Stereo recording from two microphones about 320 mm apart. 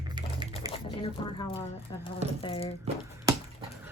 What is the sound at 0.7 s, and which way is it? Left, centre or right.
Speech, centre.